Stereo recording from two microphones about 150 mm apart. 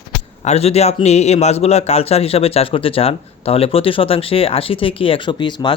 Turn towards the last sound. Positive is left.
turn(degrees=30)  # may be behind; listen again after turning